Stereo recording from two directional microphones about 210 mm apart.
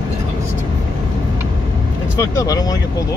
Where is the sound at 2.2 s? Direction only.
15° left (ahead or behind).